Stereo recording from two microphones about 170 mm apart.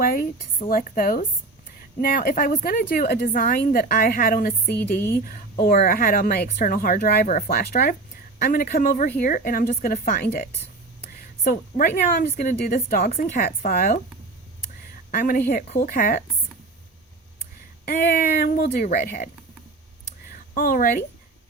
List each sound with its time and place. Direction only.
0.0 s a woman's voice: 55° left (ahead or behind)
5.5 s a woman's voice: 55° left (ahead or behind)
15.1 s a woman's voice: 55° left (ahead or behind)
17.8 s a woman's voice: 60° left (ahead or behind)
18.9 s speech: 45° left (ahead or behind)
20.5 s a woman's voice: 55° left (ahead or behind)